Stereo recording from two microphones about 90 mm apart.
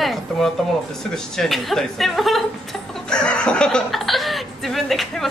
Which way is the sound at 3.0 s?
10° left (ahead or behind).